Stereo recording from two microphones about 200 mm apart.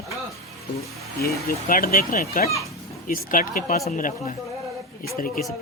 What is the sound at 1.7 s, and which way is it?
Speech, 45° left (ahead or behind).